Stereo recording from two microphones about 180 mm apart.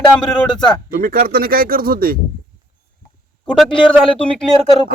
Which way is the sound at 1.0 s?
55° right (ahead or behind).